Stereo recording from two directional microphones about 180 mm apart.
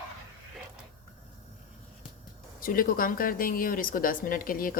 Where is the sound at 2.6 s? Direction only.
50° left (ahead or behind).